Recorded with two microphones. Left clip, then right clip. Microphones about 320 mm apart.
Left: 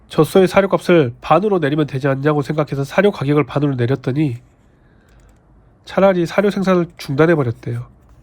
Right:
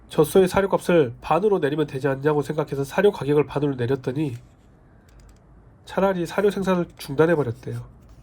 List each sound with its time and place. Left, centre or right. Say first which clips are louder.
0.1 s speech: left 5 dB; left
5.8 s speech: left 8 dB; left